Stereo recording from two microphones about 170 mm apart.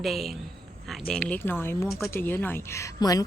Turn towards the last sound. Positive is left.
turn(degrees=20)  # may be behind; listen again after turning